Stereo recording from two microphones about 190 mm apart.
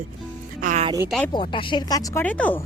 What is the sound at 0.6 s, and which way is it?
Music, 40° right (ahead or behind).